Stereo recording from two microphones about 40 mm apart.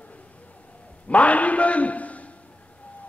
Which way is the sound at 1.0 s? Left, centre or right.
Left.